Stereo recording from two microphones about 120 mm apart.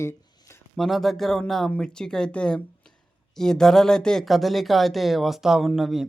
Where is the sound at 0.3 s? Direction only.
25° left (ahead or behind).